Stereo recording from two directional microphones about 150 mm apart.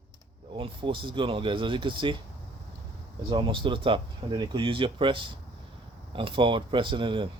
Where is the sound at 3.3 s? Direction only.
35° right (ahead or behind).